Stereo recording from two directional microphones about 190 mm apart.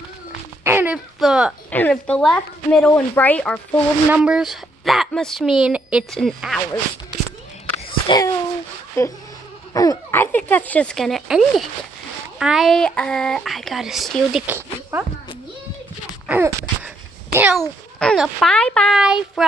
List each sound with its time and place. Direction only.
0.7 s a sound: 10° right (ahead or behind)
1.7 s speech: 5° left (ahead or behind)
4.1 s speech: 5° right (ahead or behind)
8.1 s speech: 25° left (ahead or behind); by 14.4 s centre (ahead or behind)
14.4 s speech: 10° right (ahead or behind)
16.3 s wail: 10° right (ahead or behind)
17.6 s speech: 5° left (ahead or behind)